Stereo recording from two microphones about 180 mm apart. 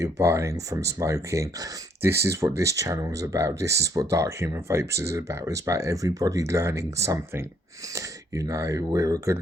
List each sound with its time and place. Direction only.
0.0 s speech: 15° right (ahead or behind)